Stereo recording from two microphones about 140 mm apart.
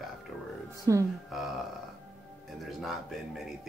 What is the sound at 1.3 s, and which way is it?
Speech, centre (ahead or behind).